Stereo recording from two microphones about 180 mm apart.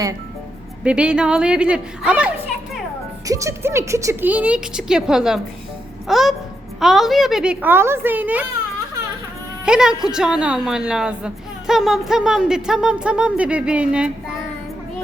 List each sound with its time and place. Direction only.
0.9 s a woman's voice: 5° right (ahead or behind)
3.2 s a woman's voice: 15° right (ahead or behind)
9.6 s a woman's voice: 5° right (ahead or behind)